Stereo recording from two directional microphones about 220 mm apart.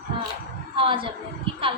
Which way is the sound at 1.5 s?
25° right (ahead or behind).